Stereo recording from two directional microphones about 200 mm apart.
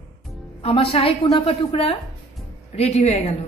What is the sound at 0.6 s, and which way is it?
A woman's voice, 30° left (ahead or behind).